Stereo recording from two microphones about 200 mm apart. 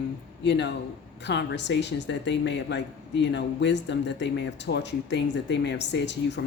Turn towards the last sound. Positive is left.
turn(degrees=60)  # may be behind; listen again after turning